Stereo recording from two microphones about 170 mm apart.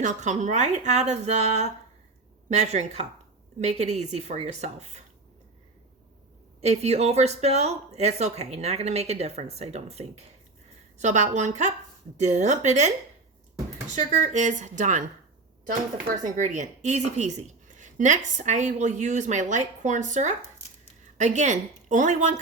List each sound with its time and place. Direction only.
0.0 s speech: 45° right (ahead or behind)
6.6 s speech: 40° right (ahead or behind)
14.1 s speech: 45° right (ahead or behind)
16.0 s speech: 45° right (ahead or behind)